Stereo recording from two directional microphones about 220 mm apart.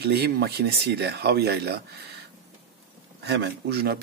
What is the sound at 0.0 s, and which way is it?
Speech, 45° right (ahead or behind).